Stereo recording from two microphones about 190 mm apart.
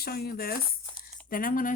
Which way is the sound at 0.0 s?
55° left (ahead or behind).